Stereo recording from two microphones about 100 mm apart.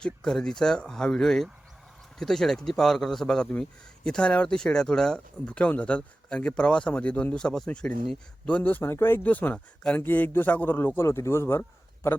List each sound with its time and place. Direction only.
0.0 s a man's voice: 5° left (ahead or behind); by 11.6 s 25° left (ahead or behind)